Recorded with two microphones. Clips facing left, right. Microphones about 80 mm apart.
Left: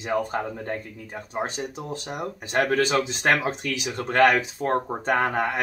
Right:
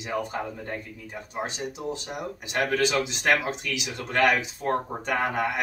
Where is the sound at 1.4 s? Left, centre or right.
Left.